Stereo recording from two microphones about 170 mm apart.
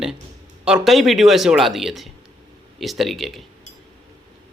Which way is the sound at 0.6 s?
Centre (ahead or behind).